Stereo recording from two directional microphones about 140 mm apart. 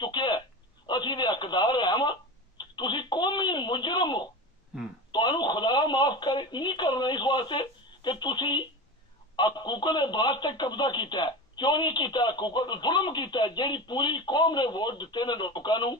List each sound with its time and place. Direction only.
0.0 s telephone: 30° left (ahead or behind)
9.4 s a man's voice: 35° left (ahead or behind)